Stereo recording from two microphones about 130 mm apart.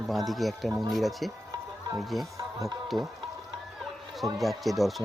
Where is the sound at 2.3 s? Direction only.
25° right (ahead or behind).